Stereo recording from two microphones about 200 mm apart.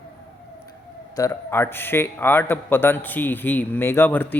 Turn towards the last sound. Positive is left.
turn(degrees=10)  # may be behind; listen again after turning